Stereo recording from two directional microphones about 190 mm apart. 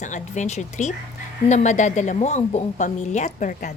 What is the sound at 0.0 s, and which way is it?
Speech, 40° left (ahead or behind).